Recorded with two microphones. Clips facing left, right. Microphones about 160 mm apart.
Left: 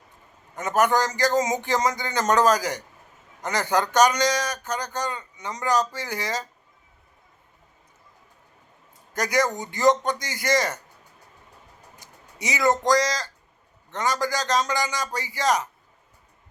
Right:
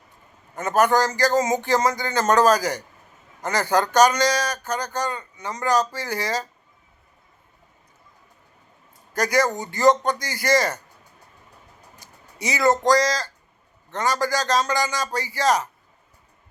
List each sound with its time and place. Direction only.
0.5 s speech: 15° left (ahead or behind)
9.1 s speech: 15° left (ahead or behind)
12.4 s speech: 15° left (ahead or behind)